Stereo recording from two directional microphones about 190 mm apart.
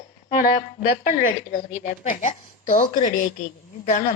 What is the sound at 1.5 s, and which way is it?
A woman's voice, 45° left (ahead or behind).